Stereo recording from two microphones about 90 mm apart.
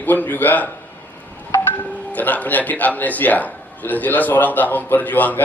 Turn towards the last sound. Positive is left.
turn(degrees=20)  # may be behind; listen again after turning